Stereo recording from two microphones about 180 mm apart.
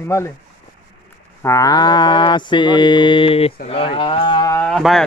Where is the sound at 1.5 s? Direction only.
20° left (ahead or behind).